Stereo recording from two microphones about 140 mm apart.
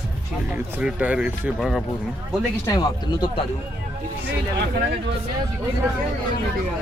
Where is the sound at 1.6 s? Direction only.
Centre (ahead or behind).